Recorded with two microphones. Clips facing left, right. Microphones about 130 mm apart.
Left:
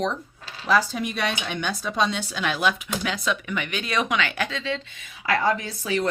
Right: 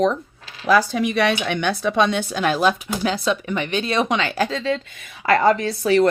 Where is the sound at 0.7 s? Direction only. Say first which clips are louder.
Right 5 dB; 80° right; by 4.9 s 40° right (ahead or behind).